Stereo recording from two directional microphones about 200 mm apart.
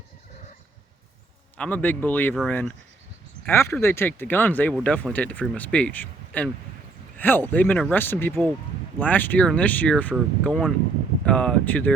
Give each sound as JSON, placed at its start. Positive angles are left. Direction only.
{"t": 1.5, "sound": "speech", "side_deg": 5}